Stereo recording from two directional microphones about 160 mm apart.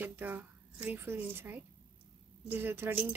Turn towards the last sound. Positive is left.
turn(degrees=-15)  # may be behind; listen again after turning